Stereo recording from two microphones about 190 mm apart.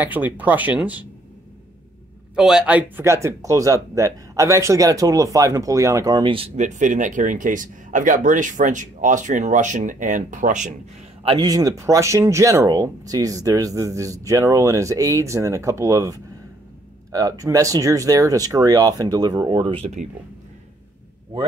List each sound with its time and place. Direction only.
0.0 s speech: 10° right (ahead or behind)
2.3 s speech: 5° right (ahead or behind); by 10.7 s 45° right (ahead or behind)
11.2 s speech: 20° right (ahead or behind)